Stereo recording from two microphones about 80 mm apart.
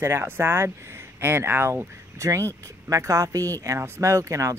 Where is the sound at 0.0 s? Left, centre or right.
Right.